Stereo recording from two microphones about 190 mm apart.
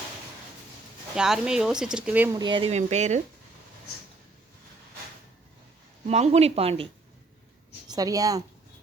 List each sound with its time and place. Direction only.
1.1 s speech: 5° right (ahead or behind)
2.4 s speech: 25° right (ahead or behind)
6.1 s speech: 35° right (ahead or behind)
7.9 s a woman's voice: 20° right (ahead or behind)